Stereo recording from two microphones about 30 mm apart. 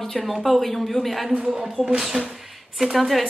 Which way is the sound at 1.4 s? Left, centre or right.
Right.